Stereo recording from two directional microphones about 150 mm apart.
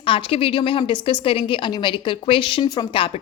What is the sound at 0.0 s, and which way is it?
A woman's voice, 35° left (ahead or behind).